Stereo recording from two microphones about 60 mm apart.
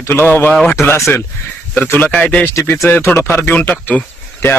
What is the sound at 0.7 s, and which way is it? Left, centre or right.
Speech, left.